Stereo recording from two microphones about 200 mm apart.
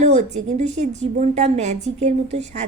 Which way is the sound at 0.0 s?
35° right (ahead or behind).